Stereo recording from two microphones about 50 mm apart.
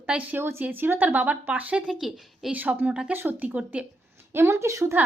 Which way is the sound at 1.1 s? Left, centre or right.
Right.